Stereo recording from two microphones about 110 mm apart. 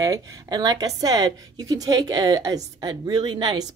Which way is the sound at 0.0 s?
35° right (ahead or behind).